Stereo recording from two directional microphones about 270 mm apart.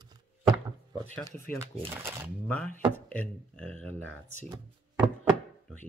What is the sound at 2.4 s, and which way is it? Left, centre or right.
Speech, centre.